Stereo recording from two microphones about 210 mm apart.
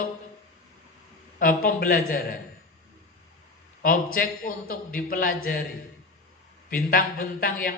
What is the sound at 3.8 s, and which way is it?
A man's voice, 45° left (ahead or behind).